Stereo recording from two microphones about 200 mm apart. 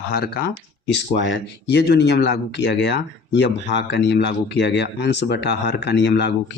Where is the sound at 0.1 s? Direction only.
50° left (ahead or behind).